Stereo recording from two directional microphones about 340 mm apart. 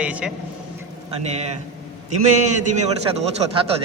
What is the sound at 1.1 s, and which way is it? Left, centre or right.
Speech, centre.